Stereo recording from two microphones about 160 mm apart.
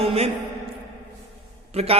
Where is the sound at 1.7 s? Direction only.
40° right (ahead or behind).